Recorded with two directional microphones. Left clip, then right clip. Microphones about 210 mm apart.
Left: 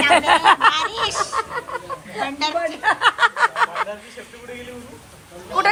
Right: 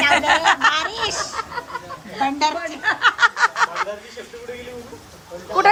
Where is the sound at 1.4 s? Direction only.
30° left (ahead or behind).